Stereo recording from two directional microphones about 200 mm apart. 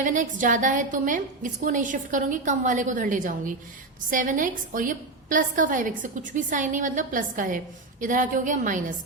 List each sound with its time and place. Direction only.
0.0 s a woman's voice: 40° right (ahead or behind)